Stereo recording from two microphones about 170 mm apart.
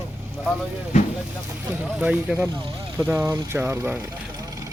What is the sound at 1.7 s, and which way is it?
Speech, 10° right (ahead or behind).